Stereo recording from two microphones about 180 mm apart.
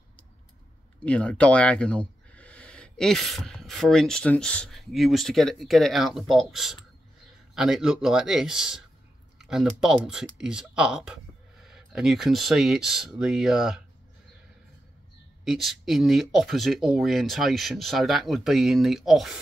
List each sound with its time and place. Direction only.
1.0 s speech: 5° left (ahead or behind)
15.4 s speech: centre (ahead or behind)